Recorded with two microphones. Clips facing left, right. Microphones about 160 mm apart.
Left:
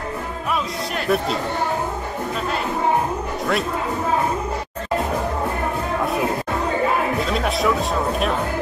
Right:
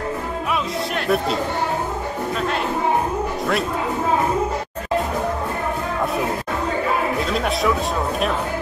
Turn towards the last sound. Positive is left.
turn(degrees=0)  # may be behind; listen again after turning